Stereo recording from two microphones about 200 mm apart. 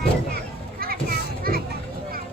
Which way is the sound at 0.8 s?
50° right (ahead or behind).